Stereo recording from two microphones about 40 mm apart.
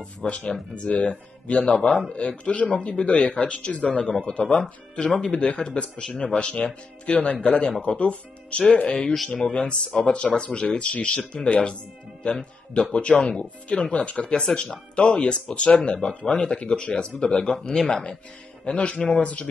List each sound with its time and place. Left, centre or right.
0.0 s speech: left
1.8 s speech: centre
2.1 s speech: left
4.0 s speech: left
4.3 s speech: left
5.1 s speech: left
8.8 s speech: left